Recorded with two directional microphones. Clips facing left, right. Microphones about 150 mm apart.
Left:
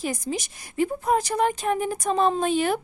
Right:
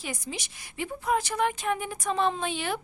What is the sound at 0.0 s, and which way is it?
A woman's voice, 40° left (ahead or behind).